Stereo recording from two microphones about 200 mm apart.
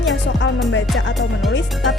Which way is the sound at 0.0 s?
65° left (ahead or behind).